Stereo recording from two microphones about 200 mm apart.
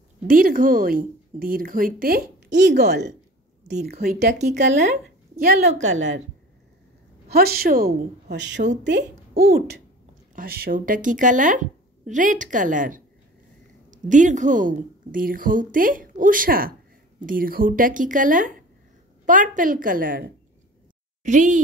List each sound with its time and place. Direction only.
0.3 s a woman's voice: 45° right (ahead or behind)
4.6 s speech: 35° right (ahead or behind)
7.2 s a woman's voice: 50° right (ahead or behind)